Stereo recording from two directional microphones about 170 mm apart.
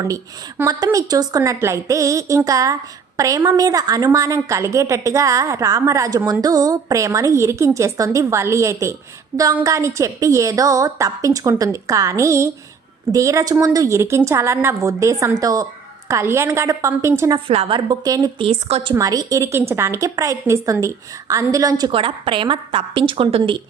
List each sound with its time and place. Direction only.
0.6 s a woman's voice: 20° right (ahead or behind)
17.5 s a woman's voice: 35° right (ahead or behind)
18.4 s a woman's voice: 30° right (ahead or behind)
18.9 s a woman's voice: 20° right (ahead or behind)